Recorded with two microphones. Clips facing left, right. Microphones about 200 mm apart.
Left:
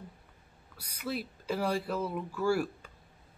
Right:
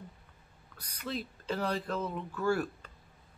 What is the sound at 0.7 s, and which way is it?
Speech, 10° left (ahead or behind).